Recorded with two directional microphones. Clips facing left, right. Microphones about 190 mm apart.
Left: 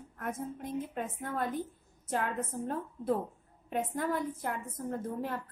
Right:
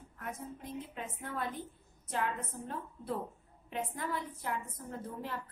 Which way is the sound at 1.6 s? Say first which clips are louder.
Left 6 dB; 45° left (ahead or behind).